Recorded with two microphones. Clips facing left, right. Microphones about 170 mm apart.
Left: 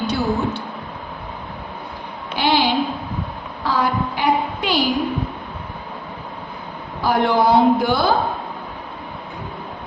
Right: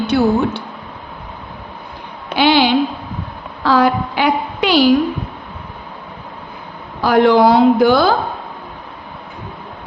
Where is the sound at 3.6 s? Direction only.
90° right.